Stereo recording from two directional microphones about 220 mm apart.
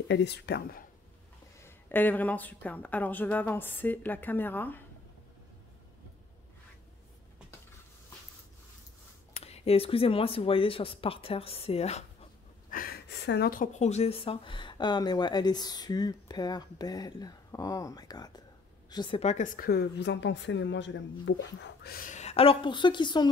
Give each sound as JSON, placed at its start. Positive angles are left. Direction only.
{"t": 0.1, "sound": "speech", "side_deg": 50}
{"t": 1.6, "sound": "speech", "side_deg": 10}
{"t": 9.4, "sound": "speech", "side_deg": 25}
{"t": 12.7, "sound": "a woman's voice", "side_deg": 45}